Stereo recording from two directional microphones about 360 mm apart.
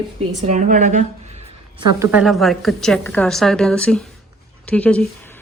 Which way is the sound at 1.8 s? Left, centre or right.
Centre.